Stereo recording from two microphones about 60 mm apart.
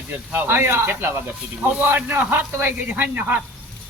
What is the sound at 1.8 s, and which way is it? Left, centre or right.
Speech, right.